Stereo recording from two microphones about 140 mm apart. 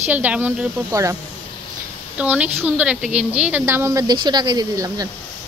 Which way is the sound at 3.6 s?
20° right (ahead or behind).